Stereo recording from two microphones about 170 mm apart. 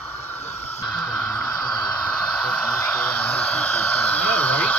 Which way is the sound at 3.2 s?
10° left (ahead or behind).